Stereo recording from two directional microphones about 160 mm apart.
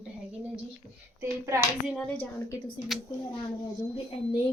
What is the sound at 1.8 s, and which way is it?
A woman's voice, 5° left (ahead or behind).